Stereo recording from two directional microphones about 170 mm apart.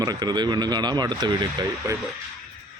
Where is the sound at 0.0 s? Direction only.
25° right (ahead or behind).